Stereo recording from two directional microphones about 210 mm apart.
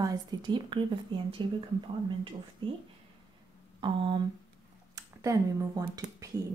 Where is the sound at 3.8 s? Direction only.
20° right (ahead or behind).